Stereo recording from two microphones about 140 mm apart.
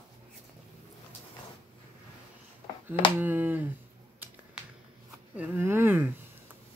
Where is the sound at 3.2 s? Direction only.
15° right (ahead or behind).